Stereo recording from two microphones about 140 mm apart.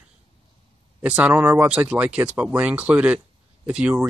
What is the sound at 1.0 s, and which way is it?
Speech, 10° right (ahead or behind).